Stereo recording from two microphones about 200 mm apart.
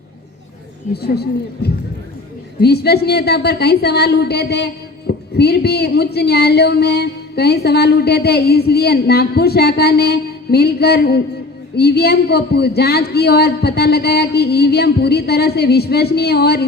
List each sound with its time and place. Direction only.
1.0 s a woman's voice: 55° left (ahead or behind)